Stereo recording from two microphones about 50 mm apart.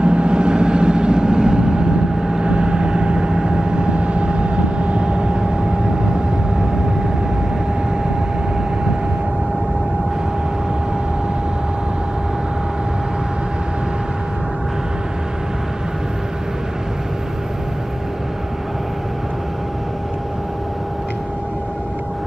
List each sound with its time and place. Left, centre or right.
0.0 s vehicle: right